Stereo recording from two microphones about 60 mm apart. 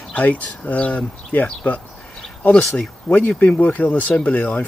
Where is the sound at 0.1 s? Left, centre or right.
Left.